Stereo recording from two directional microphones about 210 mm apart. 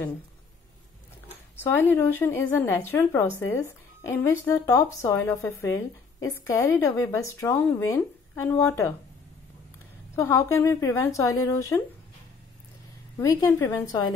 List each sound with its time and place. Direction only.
1.6 s a woman's voice: 10° left (ahead or behind)
10.1 s a woman's voice: 10° left (ahead or behind)
13.2 s a woman's voice: 15° left (ahead or behind)